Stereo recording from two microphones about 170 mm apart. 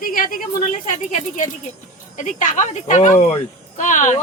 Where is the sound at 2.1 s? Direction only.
45° left (ahead or behind).